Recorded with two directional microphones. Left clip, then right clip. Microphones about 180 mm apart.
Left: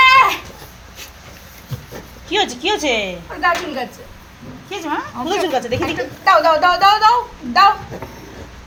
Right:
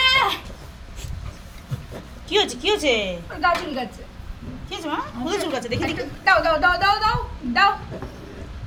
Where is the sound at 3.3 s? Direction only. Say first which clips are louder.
Left 4 dB; 25° right (ahead or behind).